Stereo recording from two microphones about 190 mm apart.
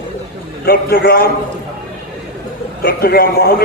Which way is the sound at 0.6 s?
55° left (ahead or behind).